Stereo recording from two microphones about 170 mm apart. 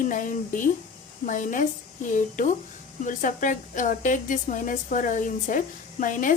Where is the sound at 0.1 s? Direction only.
50° left (ahead or behind).